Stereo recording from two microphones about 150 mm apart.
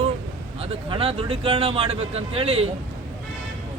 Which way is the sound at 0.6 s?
40° right (ahead or behind).